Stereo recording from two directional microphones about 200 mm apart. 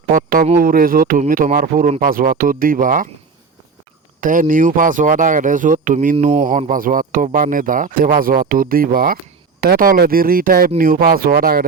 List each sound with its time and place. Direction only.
0.1 s a sound: 45° right (ahead or behind)
0.5 s speech: 45° right (ahead or behind)
4.2 s speech: 40° right (ahead or behind)